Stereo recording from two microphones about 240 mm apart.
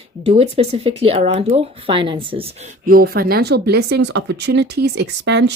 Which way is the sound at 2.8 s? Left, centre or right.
Right.